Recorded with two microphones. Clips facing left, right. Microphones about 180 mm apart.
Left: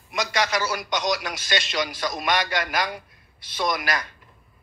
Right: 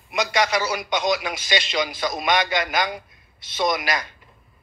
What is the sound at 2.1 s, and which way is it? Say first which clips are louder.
Speech: right 3 dB; 10° right (ahead or behind).